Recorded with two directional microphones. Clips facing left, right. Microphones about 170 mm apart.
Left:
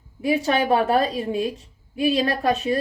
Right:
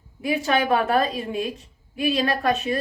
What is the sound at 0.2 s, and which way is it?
A woman's voice, 35° left (ahead or behind).